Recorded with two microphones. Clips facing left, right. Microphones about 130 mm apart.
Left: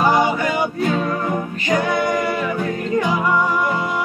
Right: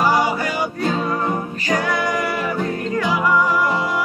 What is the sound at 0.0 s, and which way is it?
Music, 20° left (ahead or behind).